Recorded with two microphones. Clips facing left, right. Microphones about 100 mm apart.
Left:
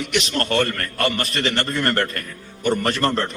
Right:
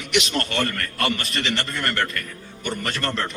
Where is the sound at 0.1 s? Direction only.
40° left (ahead or behind).